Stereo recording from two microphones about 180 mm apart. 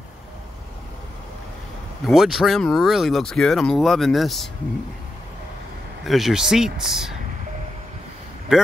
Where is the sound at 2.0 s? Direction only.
Centre (ahead or behind).